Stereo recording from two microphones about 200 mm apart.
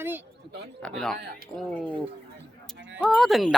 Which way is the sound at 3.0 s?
Centre (ahead or behind).